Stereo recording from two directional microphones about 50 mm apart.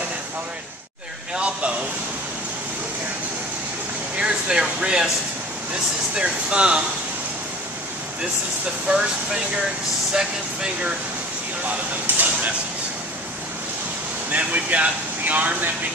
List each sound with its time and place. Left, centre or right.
1.3 s speech: right
4.2 s speech: centre
6.1 s speech: right
8.8 s speech: centre
12.1 s speech: right
14.3 s speech: right